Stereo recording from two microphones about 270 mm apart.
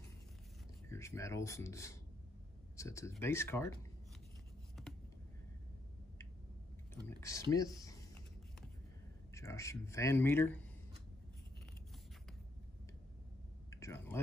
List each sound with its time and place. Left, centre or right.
0.8 s speech: centre
4.8 s vehicle: centre
7.1 s speech: centre
9.3 s speech: centre
13.7 s a sound: centre